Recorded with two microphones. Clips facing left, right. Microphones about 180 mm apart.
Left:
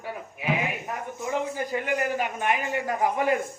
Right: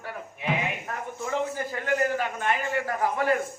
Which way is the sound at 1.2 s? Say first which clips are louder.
Even; 15° left (ahead or behind).